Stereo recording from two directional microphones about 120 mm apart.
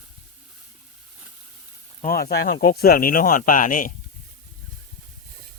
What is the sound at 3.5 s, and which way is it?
Speech, 90° left.